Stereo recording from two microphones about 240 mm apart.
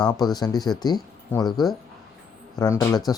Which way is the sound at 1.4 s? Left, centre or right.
Centre.